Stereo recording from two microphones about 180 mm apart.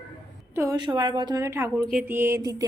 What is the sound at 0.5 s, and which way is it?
A woman's voice, 15° right (ahead or behind).